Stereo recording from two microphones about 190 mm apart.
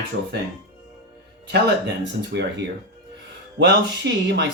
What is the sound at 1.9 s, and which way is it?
Speech, 65° right (ahead or behind).